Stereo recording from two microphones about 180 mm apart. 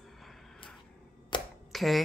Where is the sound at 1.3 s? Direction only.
25° left (ahead or behind).